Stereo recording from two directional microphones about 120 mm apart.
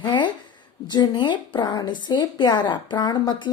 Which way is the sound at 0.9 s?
35° left (ahead or behind).